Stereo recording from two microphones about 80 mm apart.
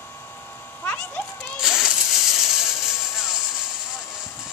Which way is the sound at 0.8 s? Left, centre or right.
Centre.